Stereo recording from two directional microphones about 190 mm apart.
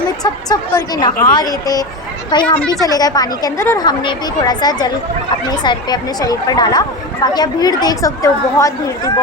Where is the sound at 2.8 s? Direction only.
20° left (ahead or behind).